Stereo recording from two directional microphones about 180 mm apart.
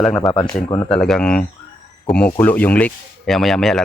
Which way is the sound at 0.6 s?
20° left (ahead or behind).